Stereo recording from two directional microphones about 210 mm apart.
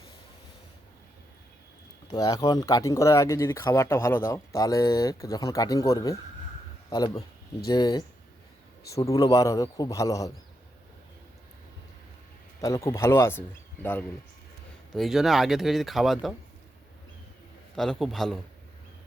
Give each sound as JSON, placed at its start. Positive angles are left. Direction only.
{"t": 2.0, "sound": "speech", "side_deg": 15}
{"t": 12.6, "sound": "speech", "side_deg": 15}
{"t": 14.9, "sound": "speech", "side_deg": 0}
{"t": 17.7, "sound": "speech", "side_deg": 0}